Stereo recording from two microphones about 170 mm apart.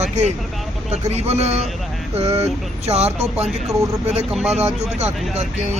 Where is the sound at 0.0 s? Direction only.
40° right (ahead or behind).